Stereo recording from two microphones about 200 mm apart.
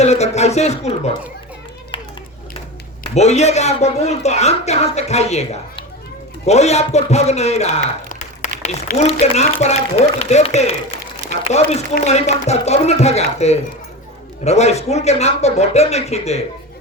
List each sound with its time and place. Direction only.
0.0 s a woman's voice: 35° left (ahead or behind)
1.9 s a sound: 25° left (ahead or behind)
3.2 s a woman's voice: 35° left (ahead or behind)
11.7 s a woman's voice: 35° left (ahead or behind)